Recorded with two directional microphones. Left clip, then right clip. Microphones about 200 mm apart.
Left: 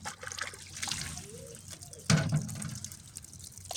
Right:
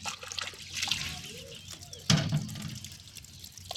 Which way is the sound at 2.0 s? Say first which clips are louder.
Right 2 dB; 25° left (ahead or behind).